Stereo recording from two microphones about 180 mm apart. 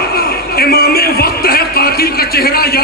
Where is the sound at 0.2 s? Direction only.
60° left (ahead or behind).